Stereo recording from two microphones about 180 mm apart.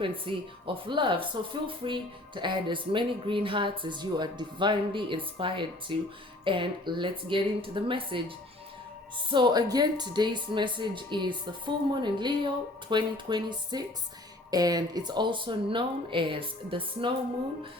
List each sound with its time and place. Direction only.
0.0 s speech: 30° right (ahead or behind)
9.3 s speech: 25° right (ahead or behind)